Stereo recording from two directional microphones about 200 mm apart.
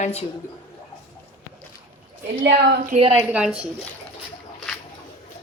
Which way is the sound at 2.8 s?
35° right (ahead or behind).